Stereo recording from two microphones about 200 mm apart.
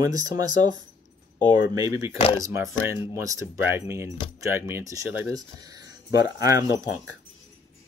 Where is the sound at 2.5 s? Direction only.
15° right (ahead or behind).